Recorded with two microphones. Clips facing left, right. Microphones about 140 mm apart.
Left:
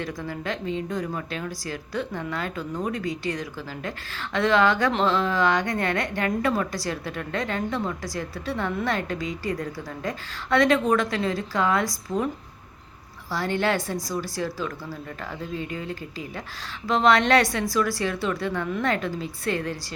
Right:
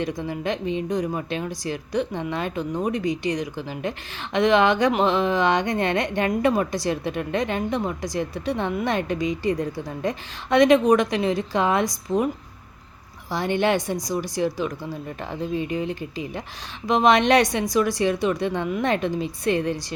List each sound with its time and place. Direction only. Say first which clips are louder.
0.0 s speech: right 4 dB; 20° right (ahead or behind)
13.3 s speech: right 3 dB; 20° right (ahead or behind)